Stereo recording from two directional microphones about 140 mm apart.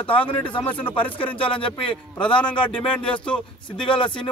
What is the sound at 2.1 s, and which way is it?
Speech, 10° left (ahead or behind).